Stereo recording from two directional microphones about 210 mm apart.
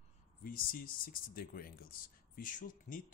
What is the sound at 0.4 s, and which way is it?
Speech, 45° left (ahead or behind).